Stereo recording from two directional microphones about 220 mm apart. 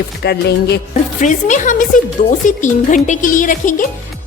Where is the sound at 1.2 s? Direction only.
35° left (ahead or behind).